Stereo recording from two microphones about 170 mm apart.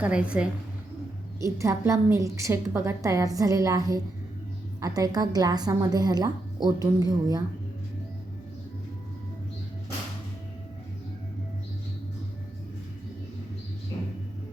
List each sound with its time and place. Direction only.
0.0 s a woman's voice: 5° right (ahead or behind)
1.4 s a woman's voice: 15° right (ahead or behind)